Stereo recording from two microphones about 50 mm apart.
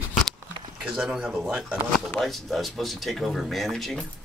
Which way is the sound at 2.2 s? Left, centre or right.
Centre.